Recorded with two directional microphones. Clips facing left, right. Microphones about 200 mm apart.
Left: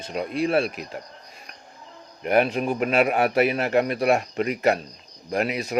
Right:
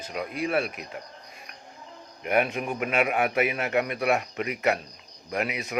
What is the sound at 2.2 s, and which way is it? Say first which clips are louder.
A man's voice: left 5 dB; 35° left (ahead or behind).